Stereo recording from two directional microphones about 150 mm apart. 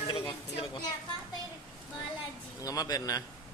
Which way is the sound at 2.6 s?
25° left (ahead or behind).